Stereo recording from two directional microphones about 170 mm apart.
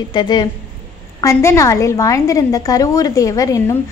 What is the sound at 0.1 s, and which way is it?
A woman's voice, 25° left (ahead or behind).